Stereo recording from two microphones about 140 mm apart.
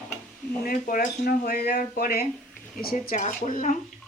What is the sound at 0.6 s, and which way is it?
Speech, 90° left.